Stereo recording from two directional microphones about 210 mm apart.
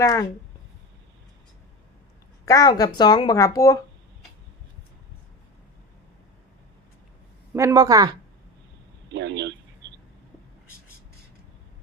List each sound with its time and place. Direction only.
0.0 s speech: 15° left (ahead or behind)
2.5 s speech: 15° left (ahead or behind)
7.5 s speech: 15° right (ahead or behind)
9.1 s speech: 55° right (ahead or behind)